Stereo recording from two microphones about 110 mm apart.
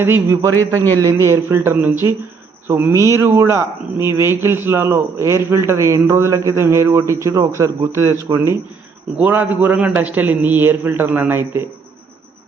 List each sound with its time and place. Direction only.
0.0 s a man's voice: 20° right (ahead or behind)
0.5 s a man's voice: 20° left (ahead or behind)
1.2 s a man's voice: 25° right (ahead or behind)
9.1 s a man's voice: 15° right (ahead or behind)